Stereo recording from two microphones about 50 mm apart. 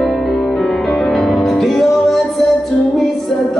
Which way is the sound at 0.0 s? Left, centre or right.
Centre.